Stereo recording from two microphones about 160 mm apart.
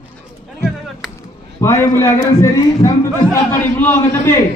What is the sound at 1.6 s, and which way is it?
A man's voice, 15° left (ahead or behind).